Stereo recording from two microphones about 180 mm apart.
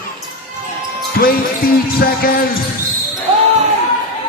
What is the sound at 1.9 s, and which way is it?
Music, 55° left (ahead or behind).